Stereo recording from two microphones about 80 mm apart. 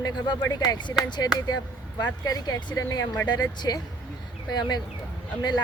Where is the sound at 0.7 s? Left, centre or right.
Left.